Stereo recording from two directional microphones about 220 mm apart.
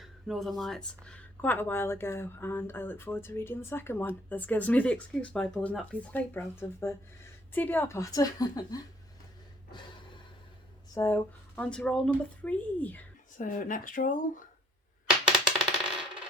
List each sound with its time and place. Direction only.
0.0 s speech: centre (ahead or behind); by 8.8 s 15° left (ahead or behind)
10.9 s speech: 10° left (ahead or behind)
13.4 s speech: 40° left (ahead or behind)
15.2 s coin: 5° right (ahead or behind)